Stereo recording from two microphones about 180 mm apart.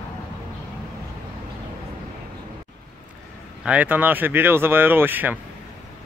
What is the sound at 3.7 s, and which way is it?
A man's voice, 10° right (ahead or behind).